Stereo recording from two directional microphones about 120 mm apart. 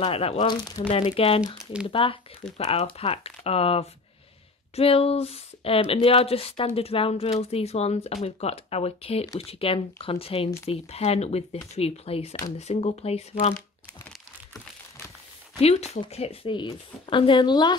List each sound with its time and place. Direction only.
0.0 s speech: 55° left (ahead or behind)
0.5 s speech: 35° left (ahead or behind)
0.8 s speech: 50° left (ahead or behind)
2.5 s speech: 65° left (ahead or behind)
15.6 s speech: 60° left (ahead or behind); by 17.7 s 40° left (ahead or behind)